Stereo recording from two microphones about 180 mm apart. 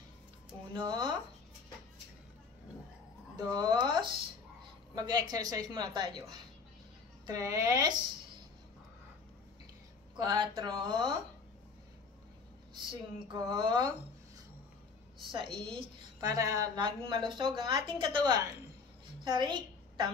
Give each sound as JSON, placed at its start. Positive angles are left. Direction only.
{"t": 0.7, "sound": "a woman's voice", "side_deg": -25}
{"t": 3.3, "sound": "a woman's voice", "side_deg": -25}
{"t": 7.2, "sound": "a woman's voice", "side_deg": -20}
{"t": 10.1, "sound": "a woman's voice", "side_deg": -25}
{"t": 13.3, "sound": "a woman's voice", "side_deg": -25}
{"t": 15.3, "sound": "a woman's voice", "side_deg": -25}
{"t": 19.2, "sound": "a sound", "side_deg": -25}